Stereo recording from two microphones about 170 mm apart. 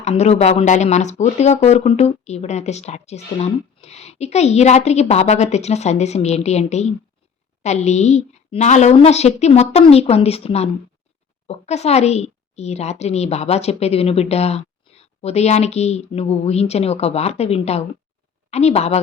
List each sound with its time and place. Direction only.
0.0 s speech: 40° left (ahead or behind)